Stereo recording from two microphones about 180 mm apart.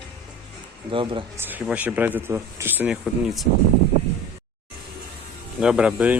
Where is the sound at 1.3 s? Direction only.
10° right (ahead or behind).